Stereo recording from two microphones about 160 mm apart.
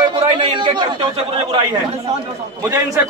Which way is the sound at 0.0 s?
30° right (ahead or behind).